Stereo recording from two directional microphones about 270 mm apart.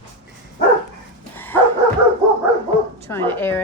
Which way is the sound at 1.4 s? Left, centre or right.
Centre.